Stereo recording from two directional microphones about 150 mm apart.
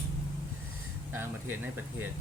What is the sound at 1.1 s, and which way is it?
Speech, 15° right (ahead or behind).